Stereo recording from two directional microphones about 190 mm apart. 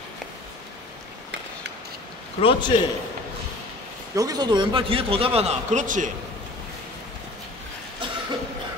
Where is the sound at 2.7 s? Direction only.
25° left (ahead or behind).